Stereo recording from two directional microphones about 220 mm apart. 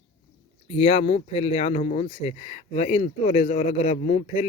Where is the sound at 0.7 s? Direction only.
25° left (ahead or behind).